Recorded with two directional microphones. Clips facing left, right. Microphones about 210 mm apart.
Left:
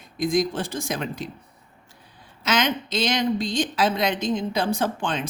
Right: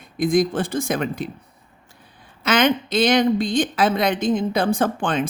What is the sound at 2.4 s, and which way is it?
A woman's voice, 55° right (ahead or behind).